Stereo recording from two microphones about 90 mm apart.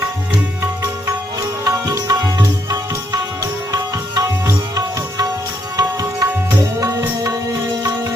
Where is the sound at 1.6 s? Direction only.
45° right (ahead or behind).